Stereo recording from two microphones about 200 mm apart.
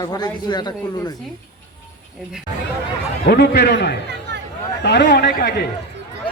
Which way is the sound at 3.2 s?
55° left (ahead or behind).